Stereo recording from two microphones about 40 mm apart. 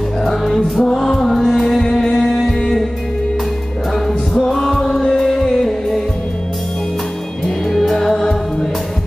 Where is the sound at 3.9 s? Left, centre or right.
Centre.